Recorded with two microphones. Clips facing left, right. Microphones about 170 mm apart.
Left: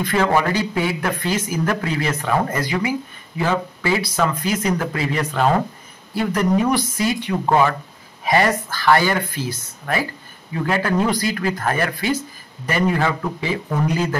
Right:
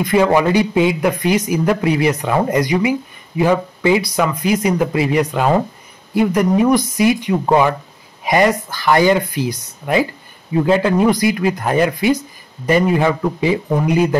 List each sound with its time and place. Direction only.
0.0 s speech: 15° right (ahead or behind)